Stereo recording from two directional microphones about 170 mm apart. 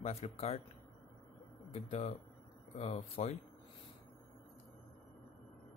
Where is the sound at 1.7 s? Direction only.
40° left (ahead or behind).